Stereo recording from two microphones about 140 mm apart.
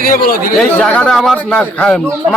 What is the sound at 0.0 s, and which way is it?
Speech, 90° left.